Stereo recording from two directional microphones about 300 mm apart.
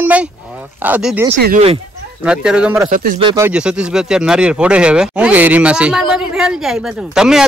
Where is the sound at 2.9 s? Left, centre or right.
Right.